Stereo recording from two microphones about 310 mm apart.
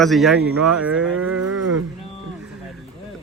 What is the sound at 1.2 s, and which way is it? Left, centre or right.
Livestock, right.